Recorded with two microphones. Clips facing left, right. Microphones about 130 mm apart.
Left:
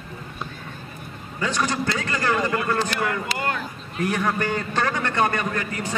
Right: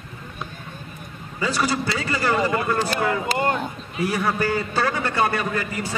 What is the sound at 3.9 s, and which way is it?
A man's voice, 5° right (ahead or behind).